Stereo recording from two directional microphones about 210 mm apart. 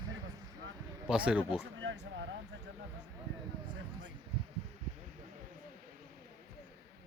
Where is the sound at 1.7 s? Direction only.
65° right (ahead or behind).